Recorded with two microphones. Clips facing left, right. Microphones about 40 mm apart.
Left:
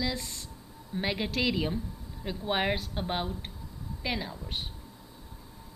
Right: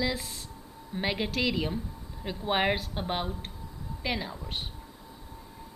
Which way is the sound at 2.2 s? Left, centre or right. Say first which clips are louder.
Right 2 dB; centre.